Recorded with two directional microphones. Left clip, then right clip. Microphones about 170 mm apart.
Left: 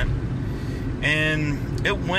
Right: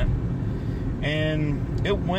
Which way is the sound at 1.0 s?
15° right (ahead or behind).